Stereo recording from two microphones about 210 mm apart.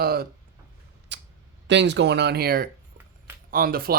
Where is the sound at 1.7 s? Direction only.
55° right (ahead or behind).